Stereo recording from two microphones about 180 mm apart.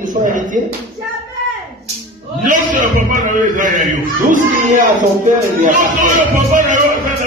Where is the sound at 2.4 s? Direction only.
45° right (ahead or behind).